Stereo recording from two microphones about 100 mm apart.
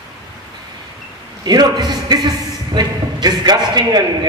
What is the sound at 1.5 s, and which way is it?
A man's voice, 45° right (ahead or behind).